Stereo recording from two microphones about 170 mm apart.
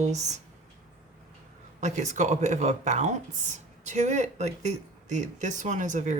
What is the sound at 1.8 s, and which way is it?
Speech, 45° right (ahead or behind).